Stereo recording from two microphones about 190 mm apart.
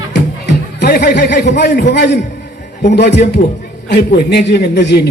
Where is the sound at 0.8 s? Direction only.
55° left (ahead or behind).